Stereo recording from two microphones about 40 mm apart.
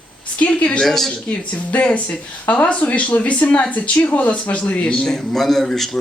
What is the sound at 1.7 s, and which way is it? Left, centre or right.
Speech, left.